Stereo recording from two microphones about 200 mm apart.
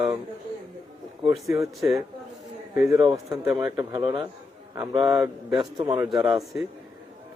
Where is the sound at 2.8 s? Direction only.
15° right (ahead or behind).